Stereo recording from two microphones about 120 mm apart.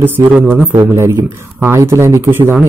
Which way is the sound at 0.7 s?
25° right (ahead or behind).